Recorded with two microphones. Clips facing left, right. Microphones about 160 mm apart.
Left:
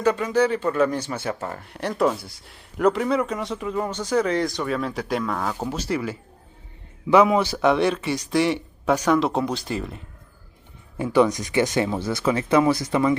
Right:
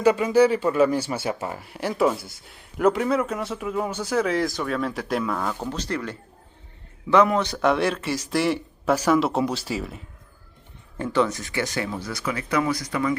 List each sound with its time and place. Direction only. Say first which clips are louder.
0.0 s speech: right 3 dB; 10° right (ahead or behind)
10.9 s speech: left 4 dB; 10° left (ahead or behind)